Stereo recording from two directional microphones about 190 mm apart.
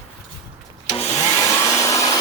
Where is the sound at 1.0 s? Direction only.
15° left (ahead or behind).